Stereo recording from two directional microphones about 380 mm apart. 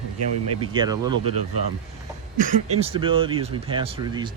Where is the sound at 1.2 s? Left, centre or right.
Right.